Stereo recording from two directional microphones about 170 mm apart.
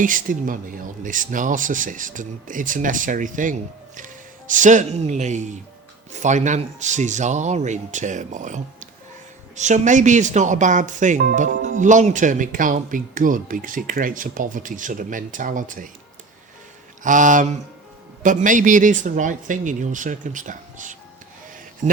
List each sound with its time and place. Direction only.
0.0 s speech: 50° right (ahead or behind)
17.0 s speech: 50° right (ahead or behind)